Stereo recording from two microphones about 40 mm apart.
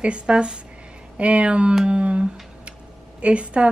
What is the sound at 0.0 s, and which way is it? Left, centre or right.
Speech, right.